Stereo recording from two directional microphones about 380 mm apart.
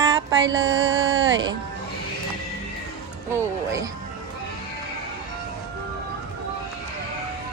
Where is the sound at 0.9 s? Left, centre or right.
Right.